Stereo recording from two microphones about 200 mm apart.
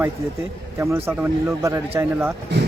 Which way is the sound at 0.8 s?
10° right (ahead or behind).